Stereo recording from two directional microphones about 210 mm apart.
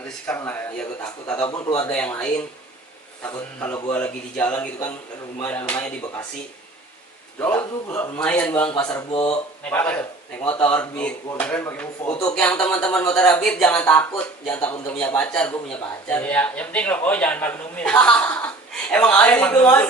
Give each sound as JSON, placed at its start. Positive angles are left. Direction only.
{"t": 0.3, "sound": "speech", "side_deg": 10}
{"t": 1.5, "sound": "a man's voice", "side_deg": 20}
{"t": 1.9, "sound": "speech", "side_deg": 5}
{"t": 7.3, "sound": "speech", "side_deg": 10}